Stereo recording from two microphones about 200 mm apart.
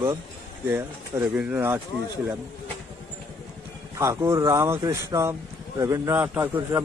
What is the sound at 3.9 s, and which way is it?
A man's voice, 15° right (ahead or behind).